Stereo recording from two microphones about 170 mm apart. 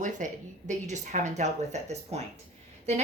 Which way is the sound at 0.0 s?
45° right (ahead or behind).